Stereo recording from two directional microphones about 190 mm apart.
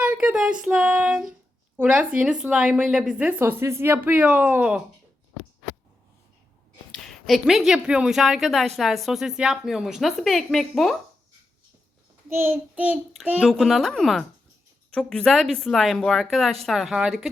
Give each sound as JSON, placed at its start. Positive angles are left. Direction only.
{"t": 0.0, "sound": "a sound", "side_deg": -5}
{"t": 0.6, "sound": "a woman's voice", "side_deg": -5}
{"t": 6.9, "sound": "a woman's voice", "side_deg": 0}
{"t": 12.3, "sound": "a woman's voice", "side_deg": -10}